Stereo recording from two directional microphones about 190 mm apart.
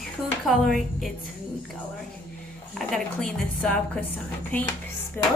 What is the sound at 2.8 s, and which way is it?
A woman's voice, 5° left (ahead or behind).